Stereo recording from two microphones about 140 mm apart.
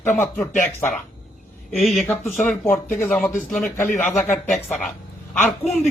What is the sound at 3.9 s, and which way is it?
Speech, 60° left (ahead or behind).